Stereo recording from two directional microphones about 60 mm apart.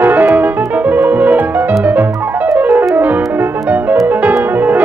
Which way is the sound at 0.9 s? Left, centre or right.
Right.